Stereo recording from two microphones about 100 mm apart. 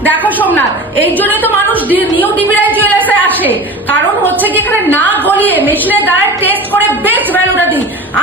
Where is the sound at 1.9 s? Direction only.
15° right (ahead or behind).